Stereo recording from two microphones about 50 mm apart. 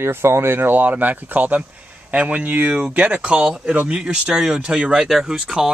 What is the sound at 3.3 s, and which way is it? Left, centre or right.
Speech, centre.